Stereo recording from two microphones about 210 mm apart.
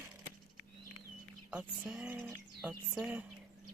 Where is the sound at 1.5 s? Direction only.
5° right (ahead or behind).